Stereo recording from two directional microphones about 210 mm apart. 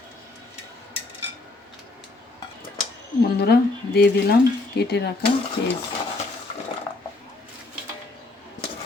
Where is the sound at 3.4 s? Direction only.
50° left (ahead or behind).